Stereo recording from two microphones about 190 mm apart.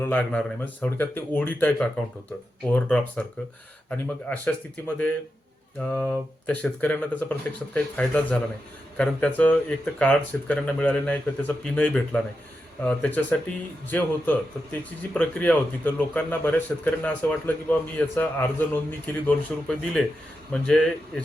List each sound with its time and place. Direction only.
0.0 s a man's voice: 10° left (ahead or behind)
5.8 s a man's voice: 5° left (ahead or behind)